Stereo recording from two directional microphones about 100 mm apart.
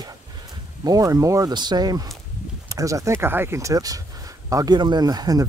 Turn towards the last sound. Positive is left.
turn(degrees=-40)  # may be behind; listen again after turning